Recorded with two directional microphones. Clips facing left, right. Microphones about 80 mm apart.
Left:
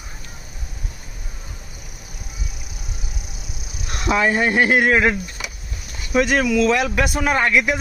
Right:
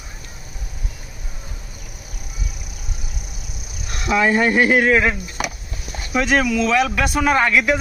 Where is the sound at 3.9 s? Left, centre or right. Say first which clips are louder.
Even; left.